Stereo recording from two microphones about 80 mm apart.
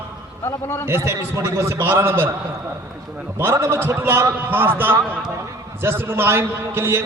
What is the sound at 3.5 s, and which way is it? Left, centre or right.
Speech, right.